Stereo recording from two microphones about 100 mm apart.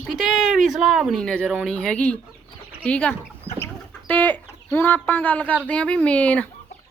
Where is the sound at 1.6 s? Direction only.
10° left (ahead or behind).